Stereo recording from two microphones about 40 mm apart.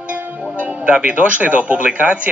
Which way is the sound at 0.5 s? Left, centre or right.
Right.